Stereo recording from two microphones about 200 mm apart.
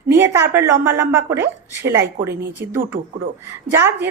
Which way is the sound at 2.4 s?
55° right (ahead or behind).